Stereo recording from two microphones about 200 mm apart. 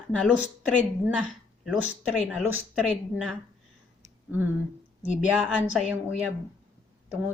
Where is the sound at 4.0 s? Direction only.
10° right (ahead or behind).